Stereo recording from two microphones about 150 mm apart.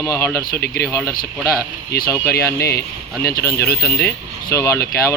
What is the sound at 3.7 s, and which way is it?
Speech, 15° left (ahead or behind).